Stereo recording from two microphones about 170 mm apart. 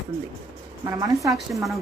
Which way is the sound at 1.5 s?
Centre (ahead or behind).